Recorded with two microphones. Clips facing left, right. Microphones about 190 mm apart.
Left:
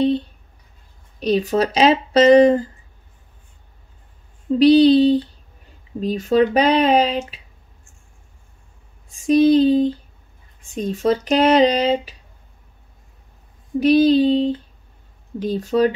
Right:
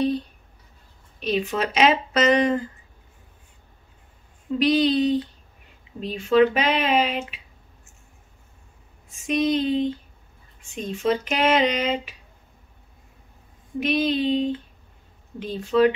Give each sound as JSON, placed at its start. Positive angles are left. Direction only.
{"t": 1.2, "sound": "speech", "side_deg": 40}
{"t": 4.6, "sound": "speech", "side_deg": 30}
{"t": 9.1, "sound": "speech", "side_deg": 35}
{"t": 13.7, "sound": "speech", "side_deg": 35}